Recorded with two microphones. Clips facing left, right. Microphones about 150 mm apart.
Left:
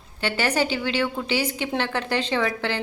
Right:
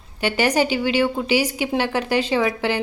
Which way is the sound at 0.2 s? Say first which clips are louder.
Right 4 dB; 15° right (ahead or behind).